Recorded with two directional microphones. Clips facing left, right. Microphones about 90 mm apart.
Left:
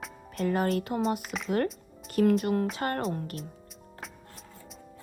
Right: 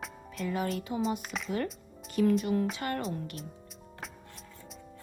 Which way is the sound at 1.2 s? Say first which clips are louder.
Left 2 dB; centre (ahead or behind).